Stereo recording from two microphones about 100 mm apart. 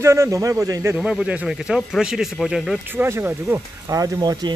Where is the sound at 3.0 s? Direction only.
20° right (ahead or behind).